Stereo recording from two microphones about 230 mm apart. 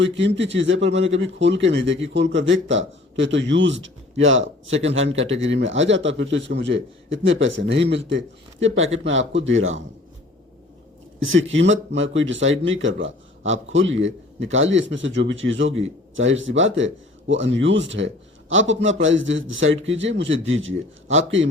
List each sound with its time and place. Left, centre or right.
0.0 s a man's voice: right
11.2 s a man's voice: right